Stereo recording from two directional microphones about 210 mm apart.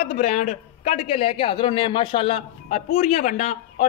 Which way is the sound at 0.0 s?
30° left (ahead or behind).